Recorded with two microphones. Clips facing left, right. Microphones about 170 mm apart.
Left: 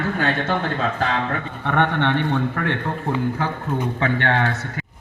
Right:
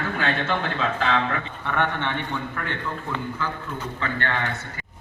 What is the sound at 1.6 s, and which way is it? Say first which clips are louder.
A man's voice: left 6 dB; 60° left (ahead or behind).